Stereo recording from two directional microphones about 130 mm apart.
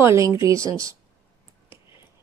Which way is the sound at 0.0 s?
20° right (ahead or behind).